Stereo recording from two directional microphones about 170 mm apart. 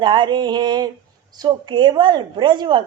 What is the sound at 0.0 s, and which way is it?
A woman's voice, 25° right (ahead or behind).